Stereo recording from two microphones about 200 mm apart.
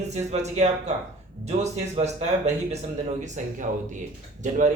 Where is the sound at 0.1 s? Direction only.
35° right (ahead or behind).